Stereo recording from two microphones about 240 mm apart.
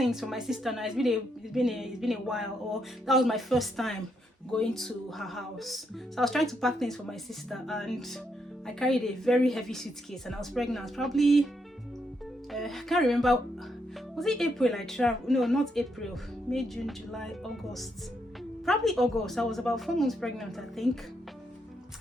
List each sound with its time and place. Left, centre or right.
0.0 s a woman's voice: centre
12.5 s a woman's voice: centre